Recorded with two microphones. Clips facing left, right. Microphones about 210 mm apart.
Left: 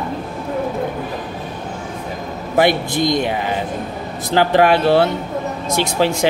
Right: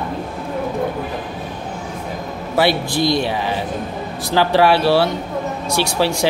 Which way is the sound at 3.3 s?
50° left (ahead or behind).